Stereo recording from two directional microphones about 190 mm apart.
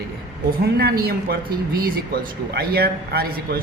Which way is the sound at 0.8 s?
55° right (ahead or behind).